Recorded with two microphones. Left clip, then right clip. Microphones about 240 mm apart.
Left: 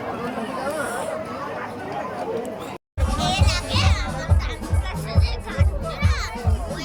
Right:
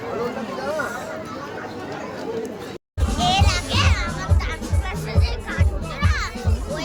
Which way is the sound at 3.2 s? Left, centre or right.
Centre.